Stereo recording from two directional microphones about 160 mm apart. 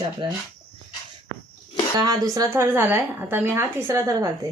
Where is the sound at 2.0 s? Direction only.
25° right (ahead or behind).